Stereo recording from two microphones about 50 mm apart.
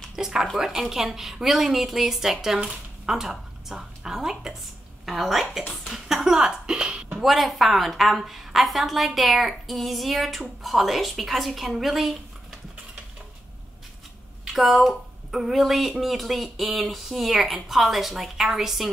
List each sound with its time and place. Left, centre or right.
0.1 s a woman's voice: centre
7.2 s a woman's voice: centre
14.5 s a woman's voice: centre